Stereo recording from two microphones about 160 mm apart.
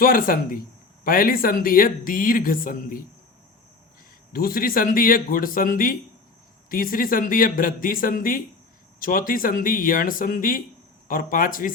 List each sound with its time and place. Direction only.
0.0 s speech: 65° left (ahead or behind)
4.3 s speech: 65° left (ahead or behind)